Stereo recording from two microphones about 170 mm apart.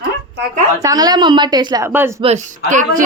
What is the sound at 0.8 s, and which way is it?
A woman's voice, 25° right (ahead or behind).